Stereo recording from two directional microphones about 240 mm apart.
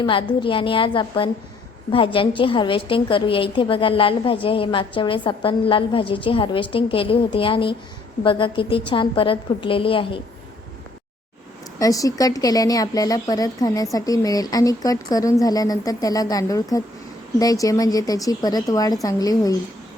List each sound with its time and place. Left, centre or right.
0.0 s a woman's voice: centre
11.8 s speech: centre